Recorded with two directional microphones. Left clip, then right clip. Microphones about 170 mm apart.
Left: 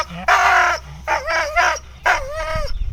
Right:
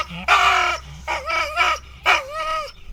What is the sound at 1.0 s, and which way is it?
Dog, 20° left (ahead or behind).